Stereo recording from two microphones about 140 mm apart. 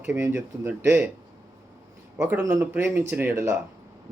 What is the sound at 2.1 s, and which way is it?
Speech, 15° right (ahead or behind).